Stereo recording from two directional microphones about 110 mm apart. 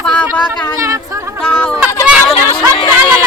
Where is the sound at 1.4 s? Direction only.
15° left (ahead or behind).